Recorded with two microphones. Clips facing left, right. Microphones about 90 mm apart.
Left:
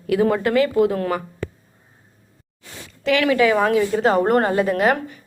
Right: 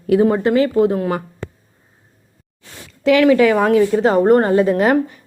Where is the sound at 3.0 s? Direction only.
35° right (ahead or behind).